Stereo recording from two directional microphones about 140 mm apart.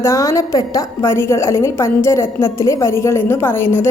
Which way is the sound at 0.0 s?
20° left (ahead or behind).